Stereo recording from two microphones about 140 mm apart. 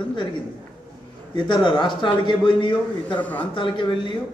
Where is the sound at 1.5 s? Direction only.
35° left (ahead or behind).